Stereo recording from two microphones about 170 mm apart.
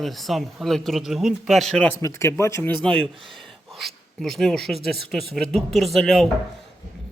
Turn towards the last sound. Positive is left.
turn(degrees=0)  # may be behind; listen again after turning